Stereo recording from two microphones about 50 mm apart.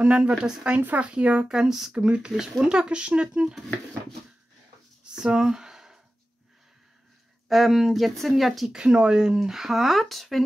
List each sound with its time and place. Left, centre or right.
0.0 s speech: right
1.5 s speech: centre
2.0 s speech: right
5.1 s speech: centre
5.4 s a sound: centre
7.4 s speech: centre
8.7 s speech: centre